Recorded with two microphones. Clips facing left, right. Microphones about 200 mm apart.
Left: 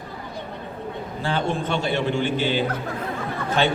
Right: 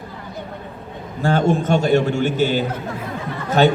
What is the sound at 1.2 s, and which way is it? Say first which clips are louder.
A man's voice: right 7 dB; 45° right (ahead or behind).